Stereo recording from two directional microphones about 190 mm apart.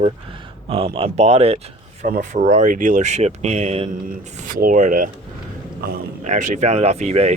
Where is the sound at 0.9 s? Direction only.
30° right (ahead or behind).